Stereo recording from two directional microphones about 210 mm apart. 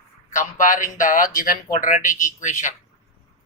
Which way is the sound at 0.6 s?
40° left (ahead or behind).